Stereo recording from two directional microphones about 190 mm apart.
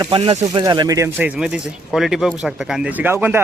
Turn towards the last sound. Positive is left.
turn(degrees=-10)  # may be behind; listen again after turning